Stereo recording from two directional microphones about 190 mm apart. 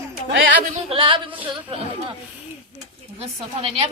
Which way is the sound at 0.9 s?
25° right (ahead or behind).